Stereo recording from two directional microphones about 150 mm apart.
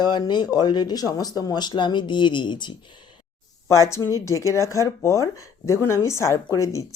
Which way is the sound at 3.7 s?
20° left (ahead or behind).